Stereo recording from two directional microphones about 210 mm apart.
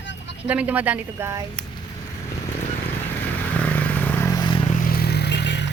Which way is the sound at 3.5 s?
10° left (ahead or behind).